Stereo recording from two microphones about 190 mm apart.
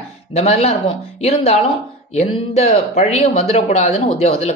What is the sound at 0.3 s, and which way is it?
Speech, 35° left (ahead or behind).